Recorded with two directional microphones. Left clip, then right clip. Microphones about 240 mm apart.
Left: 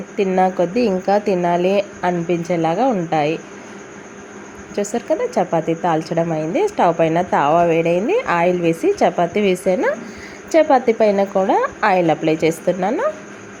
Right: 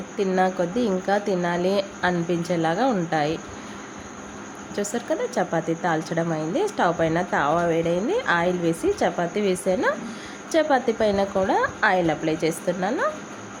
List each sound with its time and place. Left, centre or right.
0.2 s a woman's voice: centre
4.7 s a woman's voice: centre